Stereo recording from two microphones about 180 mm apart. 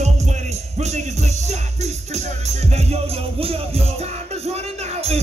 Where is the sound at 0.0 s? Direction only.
40° right (ahead or behind).